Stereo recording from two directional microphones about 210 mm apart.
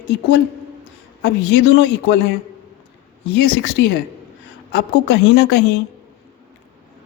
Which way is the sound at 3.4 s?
55° left (ahead or behind).